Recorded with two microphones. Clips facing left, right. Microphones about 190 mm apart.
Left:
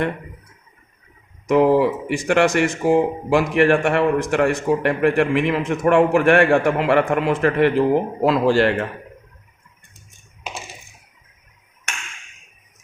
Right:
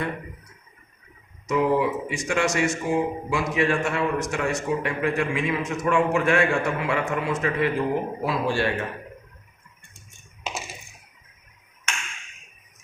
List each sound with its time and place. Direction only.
1.5 s speech: 85° left